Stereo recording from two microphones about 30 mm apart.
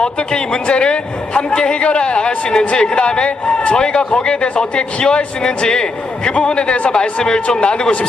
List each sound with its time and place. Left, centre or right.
0.0 s a man's voice: left
5.4 s a man's voice: left